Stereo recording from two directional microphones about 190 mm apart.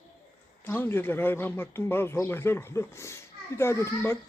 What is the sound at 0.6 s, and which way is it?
Speech, 10° left (ahead or behind).